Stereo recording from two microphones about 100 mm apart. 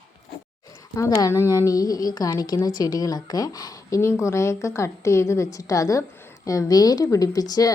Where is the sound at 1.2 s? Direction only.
30° left (ahead or behind).